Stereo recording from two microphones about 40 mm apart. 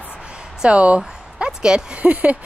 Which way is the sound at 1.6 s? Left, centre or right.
Right.